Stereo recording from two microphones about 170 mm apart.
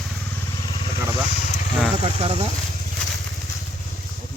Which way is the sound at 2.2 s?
35° right (ahead or behind).